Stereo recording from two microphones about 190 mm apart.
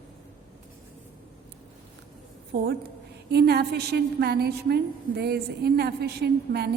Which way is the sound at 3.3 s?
60° right (ahead or behind).